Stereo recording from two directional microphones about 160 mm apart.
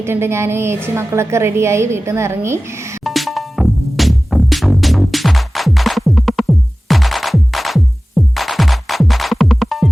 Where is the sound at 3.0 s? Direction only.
Centre (ahead or behind).